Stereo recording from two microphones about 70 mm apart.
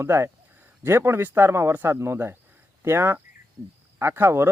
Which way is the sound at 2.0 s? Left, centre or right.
Right.